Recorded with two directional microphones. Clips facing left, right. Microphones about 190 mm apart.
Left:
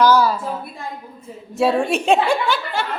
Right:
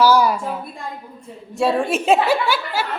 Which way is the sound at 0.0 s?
10° right (ahead or behind).